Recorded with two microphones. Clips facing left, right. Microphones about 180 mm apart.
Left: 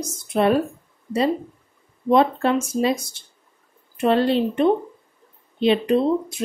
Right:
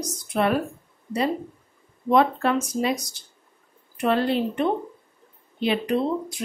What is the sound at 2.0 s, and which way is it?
Speech, 25° left (ahead or behind).